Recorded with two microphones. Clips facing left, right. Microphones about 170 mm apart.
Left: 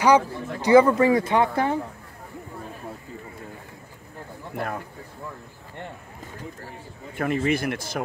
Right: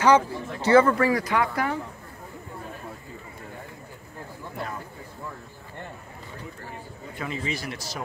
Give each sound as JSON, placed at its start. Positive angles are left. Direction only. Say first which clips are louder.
{"t": 0.0, "sound": "speech", "louder": "left 1 dB", "side_deg": 15}
{"t": 7.2, "sound": "speech", "louder": "left 8 dB", "side_deg": 55}